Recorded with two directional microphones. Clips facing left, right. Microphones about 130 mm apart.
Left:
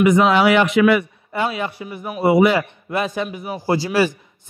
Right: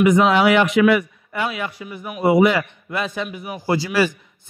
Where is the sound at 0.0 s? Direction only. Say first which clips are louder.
Left 1 dB; 30° left (ahead or behind).